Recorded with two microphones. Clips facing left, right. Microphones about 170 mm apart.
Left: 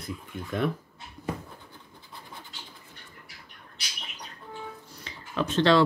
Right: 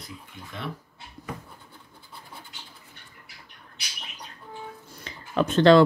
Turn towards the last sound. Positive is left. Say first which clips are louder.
# right 5 dB
turn(degrees=-50)  # may be behind; listen again after turning